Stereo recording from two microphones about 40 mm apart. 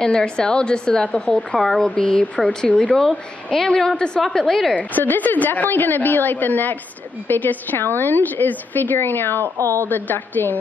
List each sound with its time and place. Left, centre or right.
0.0 s a woman's voice: left
3.5 s a woman's voice: centre
4.7 s a woman's voice: left
8.9 s a woman's voice: left